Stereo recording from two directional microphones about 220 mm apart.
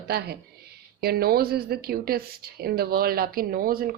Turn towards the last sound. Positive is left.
turn(degrees=-40)  # may be behind; listen again after turning